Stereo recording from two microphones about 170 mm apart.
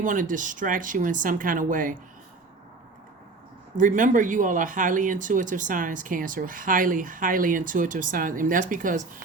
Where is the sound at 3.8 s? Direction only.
50° right (ahead or behind).